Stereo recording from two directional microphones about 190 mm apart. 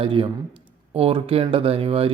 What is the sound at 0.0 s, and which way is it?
Speech, 30° right (ahead or behind).